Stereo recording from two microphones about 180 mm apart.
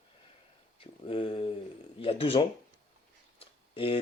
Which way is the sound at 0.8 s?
30° left (ahead or behind).